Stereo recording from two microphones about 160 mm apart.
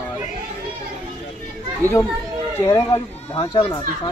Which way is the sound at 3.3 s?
35° left (ahead or behind).